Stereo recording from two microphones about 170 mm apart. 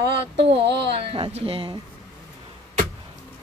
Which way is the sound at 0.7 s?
85° right.